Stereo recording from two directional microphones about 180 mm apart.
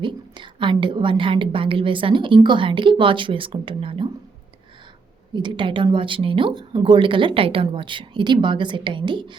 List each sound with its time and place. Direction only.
0.0 s a woman's voice: 25° right (ahead or behind)
5.3 s a woman's voice: 25° right (ahead or behind)